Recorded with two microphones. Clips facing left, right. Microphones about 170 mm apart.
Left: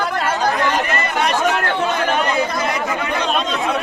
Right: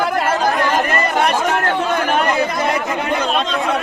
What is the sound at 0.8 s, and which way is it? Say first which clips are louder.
Speech: right 3 dB; 40° right (ahead or behind).